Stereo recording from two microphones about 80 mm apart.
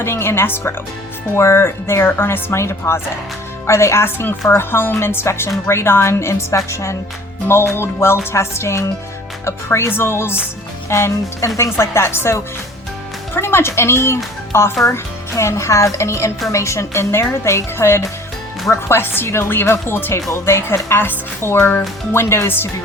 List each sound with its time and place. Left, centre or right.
0.0 s speech: left